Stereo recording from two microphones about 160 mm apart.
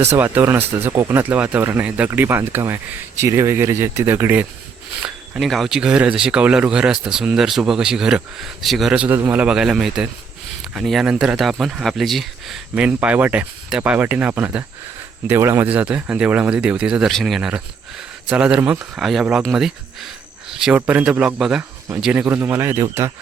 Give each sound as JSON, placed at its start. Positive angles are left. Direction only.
{"t": 0.2, "sound": "speech", "side_deg": -15}